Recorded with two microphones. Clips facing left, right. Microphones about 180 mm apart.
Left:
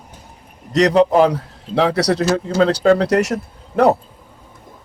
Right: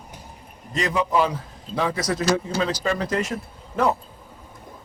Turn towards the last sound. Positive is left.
turn(degrees=70)  # may be behind; listen again after turning